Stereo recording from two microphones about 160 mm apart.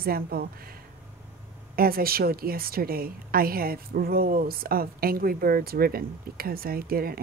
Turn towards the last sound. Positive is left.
turn(degrees=-70)  # may be behind; listen again after turning